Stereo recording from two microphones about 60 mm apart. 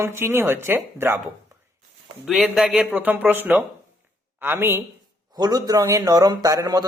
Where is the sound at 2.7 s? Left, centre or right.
Right.